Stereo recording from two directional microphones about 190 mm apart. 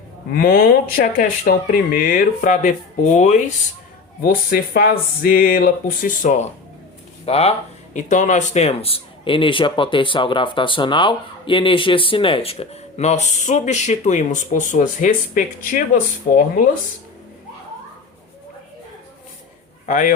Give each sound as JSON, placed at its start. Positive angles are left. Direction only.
{"t": 0.3, "sound": "speech", "side_deg": 50}
{"t": 4.2, "sound": "a man's voice", "side_deg": 50}
{"t": 19.9, "sound": "speech", "side_deg": 45}